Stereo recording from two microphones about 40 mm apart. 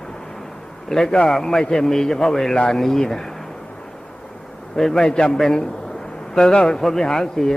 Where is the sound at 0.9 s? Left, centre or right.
Centre.